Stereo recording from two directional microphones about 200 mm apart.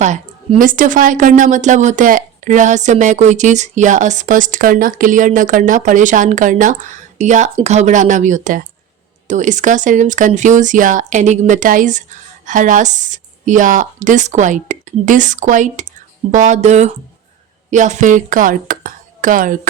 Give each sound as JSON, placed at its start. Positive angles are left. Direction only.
{"t": 0.0, "sound": "speech", "side_deg": -35}